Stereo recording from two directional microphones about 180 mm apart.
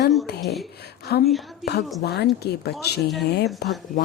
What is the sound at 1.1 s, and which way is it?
Speech, 60° left (ahead or behind).